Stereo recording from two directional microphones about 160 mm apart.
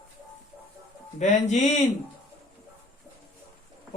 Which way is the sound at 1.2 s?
50° left (ahead or behind).